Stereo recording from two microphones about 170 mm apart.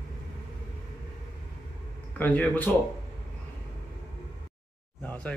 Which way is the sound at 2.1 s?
10° left (ahead or behind).